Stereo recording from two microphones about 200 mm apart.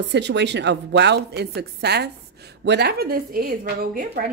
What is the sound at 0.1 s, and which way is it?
A woman's voice, 60° right (ahead or behind).